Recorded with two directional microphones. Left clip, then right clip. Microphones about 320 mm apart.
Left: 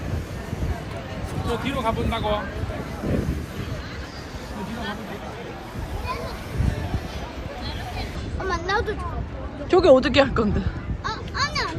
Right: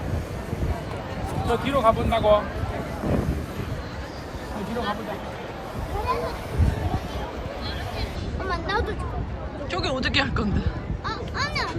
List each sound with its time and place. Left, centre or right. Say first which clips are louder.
1.5 s speech: right 5 dB; right
8.4 s vehicle: left 2 dB; centre
9.6 s speech: left 12 dB; centre
11.0 s a sound: left 2 dB; centre